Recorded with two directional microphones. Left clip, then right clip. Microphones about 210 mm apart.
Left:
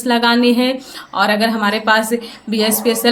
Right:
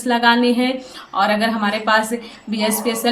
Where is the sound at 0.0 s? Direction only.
40° left (ahead or behind).